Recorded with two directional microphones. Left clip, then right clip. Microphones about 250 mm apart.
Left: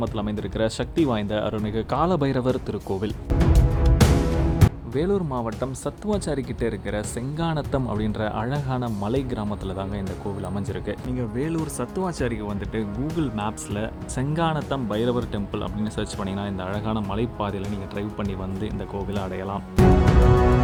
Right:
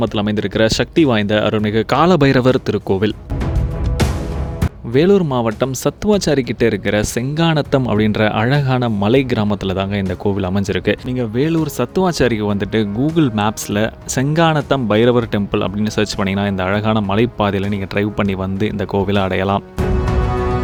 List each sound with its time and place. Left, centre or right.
0.0 s speech: right
4.9 s speech: right